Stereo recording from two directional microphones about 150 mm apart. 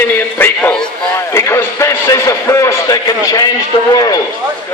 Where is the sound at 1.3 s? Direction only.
20° left (ahead or behind).